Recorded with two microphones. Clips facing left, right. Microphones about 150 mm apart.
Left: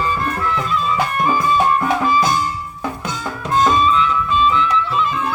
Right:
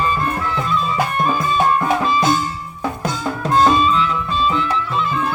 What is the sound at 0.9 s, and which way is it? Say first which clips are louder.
Music: left 2 dB; 25° right (ahead or behind).